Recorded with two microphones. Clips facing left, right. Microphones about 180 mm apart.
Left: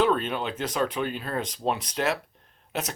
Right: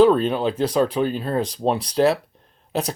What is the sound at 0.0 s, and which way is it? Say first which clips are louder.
Speech: right 9 dB; 35° right (ahead or behind).